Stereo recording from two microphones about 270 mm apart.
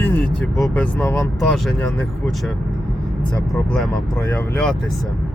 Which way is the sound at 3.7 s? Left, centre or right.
Centre.